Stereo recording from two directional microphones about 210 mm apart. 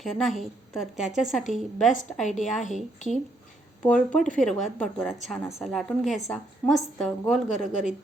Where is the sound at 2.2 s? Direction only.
35° left (ahead or behind).